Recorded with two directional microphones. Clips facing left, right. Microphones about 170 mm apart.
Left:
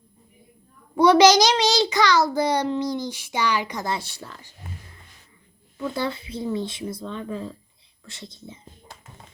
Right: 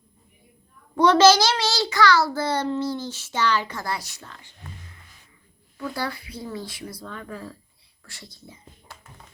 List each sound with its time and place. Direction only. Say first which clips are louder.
0.9 s a child's voice: left 1 dB; 10° left (ahead or behind); by 4.7 s 30° left (ahead or behind)
5.7 s speech: left 3 dB; 20° left (ahead or behind)